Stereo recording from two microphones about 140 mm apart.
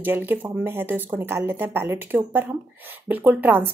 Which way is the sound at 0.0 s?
15° right (ahead or behind).